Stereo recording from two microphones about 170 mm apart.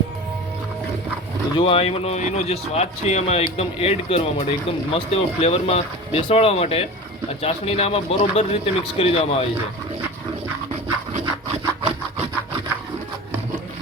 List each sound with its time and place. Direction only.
1.5 s speech: 35° left (ahead or behind)